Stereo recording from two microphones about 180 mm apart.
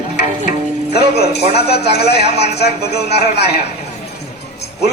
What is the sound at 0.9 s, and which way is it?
A man's voice, 65° left (ahead or behind).